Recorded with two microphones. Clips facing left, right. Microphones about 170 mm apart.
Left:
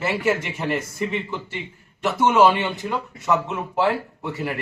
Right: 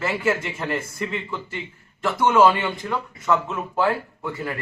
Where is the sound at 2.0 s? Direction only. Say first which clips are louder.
Even; 10° left (ahead or behind).